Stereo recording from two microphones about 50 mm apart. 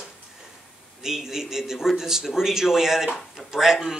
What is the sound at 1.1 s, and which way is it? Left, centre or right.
A man's voice, centre.